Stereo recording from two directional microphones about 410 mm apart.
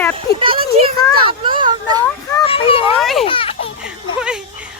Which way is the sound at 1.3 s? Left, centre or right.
Centre.